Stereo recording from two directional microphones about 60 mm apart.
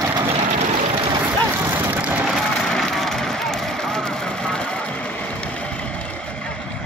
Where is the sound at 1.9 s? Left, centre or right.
Right.